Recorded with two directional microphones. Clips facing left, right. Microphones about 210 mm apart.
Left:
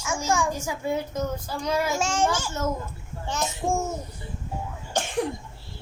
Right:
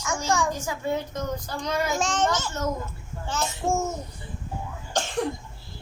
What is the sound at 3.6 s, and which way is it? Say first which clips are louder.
Speech: right 1 dB; 10° left (ahead or behind).